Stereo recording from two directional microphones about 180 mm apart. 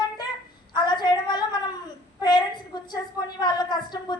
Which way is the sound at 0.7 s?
25° left (ahead or behind).